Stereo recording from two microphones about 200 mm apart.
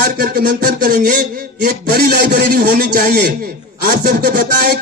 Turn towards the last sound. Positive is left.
turn(degrees=-45)  # may be behind; listen again after turning